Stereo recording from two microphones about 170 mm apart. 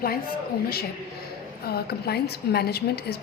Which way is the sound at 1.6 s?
65° left (ahead or behind).